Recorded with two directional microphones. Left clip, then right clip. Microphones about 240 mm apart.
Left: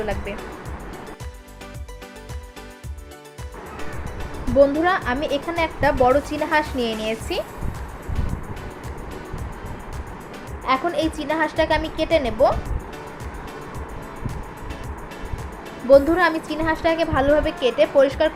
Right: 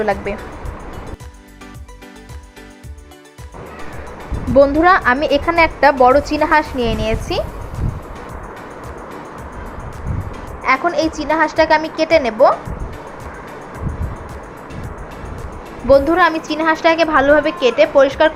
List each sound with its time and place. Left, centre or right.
0.0 s speech: centre
4.5 s speech: centre
10.7 s a woman's voice: centre
15.9 s a woman's voice: centre